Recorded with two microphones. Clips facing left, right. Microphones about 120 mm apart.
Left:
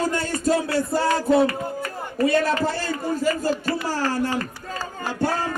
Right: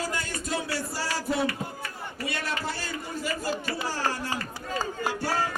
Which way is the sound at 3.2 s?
45° left (ahead or behind).